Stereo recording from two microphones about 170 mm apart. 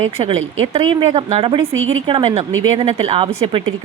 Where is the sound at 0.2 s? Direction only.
35° right (ahead or behind).